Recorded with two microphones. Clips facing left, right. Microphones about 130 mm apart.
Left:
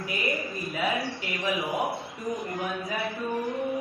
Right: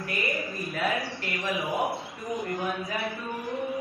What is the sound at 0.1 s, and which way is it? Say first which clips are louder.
A man's voice: left 1 dB; centre (ahead or behind).